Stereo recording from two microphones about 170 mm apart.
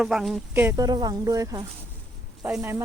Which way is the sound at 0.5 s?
15° right (ahead or behind).